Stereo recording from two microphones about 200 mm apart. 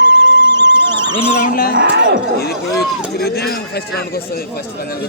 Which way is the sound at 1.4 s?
45° left (ahead or behind).